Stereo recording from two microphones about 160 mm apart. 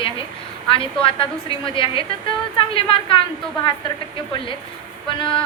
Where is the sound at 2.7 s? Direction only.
35° left (ahead or behind).